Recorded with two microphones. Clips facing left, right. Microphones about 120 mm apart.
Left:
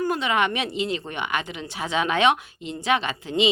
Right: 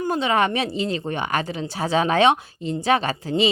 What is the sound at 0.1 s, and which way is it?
A woman's voice, 35° right (ahead or behind).